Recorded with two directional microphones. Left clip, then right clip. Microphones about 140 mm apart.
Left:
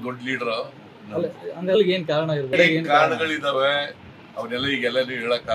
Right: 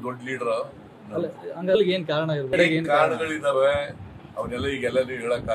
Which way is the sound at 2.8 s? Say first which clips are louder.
Left 2 dB; 15° right (ahead or behind).